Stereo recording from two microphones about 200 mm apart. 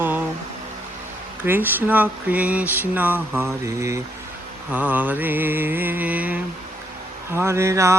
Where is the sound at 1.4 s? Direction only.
10° right (ahead or behind).